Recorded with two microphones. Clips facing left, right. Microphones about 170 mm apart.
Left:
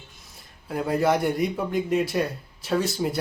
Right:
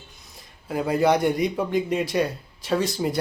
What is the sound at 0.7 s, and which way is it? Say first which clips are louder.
A man's voice: right 2 dB; centre (ahead or behind).